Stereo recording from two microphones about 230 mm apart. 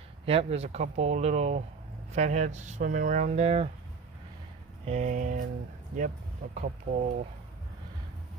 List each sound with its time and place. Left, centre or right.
0.2 s speech: right
4.8 s speech: right